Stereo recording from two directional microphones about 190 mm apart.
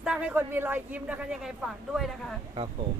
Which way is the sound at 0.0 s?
5° right (ahead or behind).